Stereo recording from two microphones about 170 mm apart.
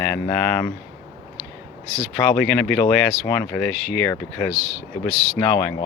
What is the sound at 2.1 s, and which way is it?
Speech, 5° left (ahead or behind).